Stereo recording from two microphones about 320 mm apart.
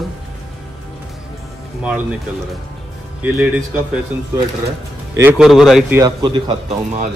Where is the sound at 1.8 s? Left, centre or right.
Centre.